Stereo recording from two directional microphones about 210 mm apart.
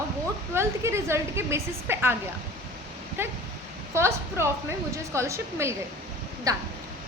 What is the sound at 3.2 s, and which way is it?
Speech, 10° right (ahead or behind).